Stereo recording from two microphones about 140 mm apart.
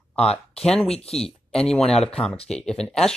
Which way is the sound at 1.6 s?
5° left (ahead or behind).